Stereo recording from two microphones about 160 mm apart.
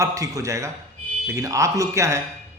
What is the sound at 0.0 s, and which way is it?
A man's voice, 20° right (ahead or behind).